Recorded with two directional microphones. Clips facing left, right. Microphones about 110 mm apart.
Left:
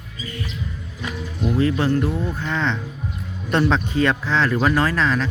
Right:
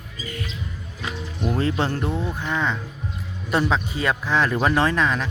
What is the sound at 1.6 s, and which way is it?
Speech, 30° right (ahead or behind).